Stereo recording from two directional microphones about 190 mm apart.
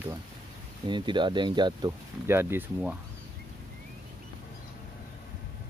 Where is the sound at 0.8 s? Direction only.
25° right (ahead or behind).